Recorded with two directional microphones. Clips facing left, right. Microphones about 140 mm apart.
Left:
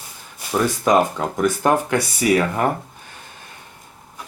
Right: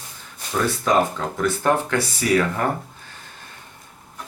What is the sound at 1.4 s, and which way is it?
Speech, 15° left (ahead or behind).